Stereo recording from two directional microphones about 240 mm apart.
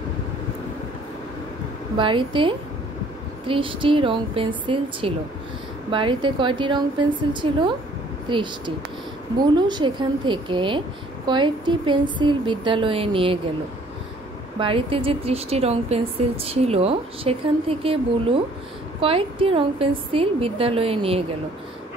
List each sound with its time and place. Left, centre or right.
2.0 s a woman's voice: right
14.6 s a woman's voice: right